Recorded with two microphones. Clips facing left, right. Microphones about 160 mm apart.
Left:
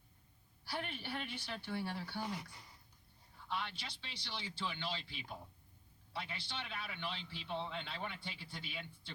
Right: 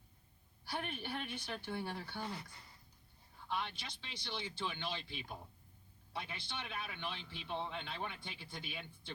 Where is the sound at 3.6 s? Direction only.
50° right (ahead or behind).